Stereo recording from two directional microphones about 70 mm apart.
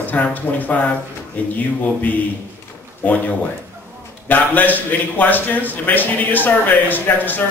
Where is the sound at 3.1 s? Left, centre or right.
Left.